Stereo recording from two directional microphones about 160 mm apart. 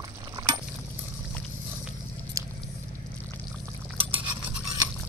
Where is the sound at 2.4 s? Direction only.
20° right (ahead or behind).